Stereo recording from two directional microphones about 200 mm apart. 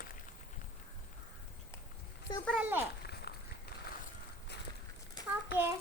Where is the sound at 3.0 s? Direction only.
55° left (ahead or behind).